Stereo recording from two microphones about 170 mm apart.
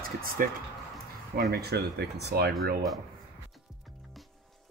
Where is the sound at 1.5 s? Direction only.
70° right (ahead or behind).